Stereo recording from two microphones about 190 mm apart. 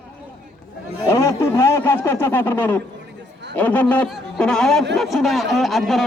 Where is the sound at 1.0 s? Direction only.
15° left (ahead or behind).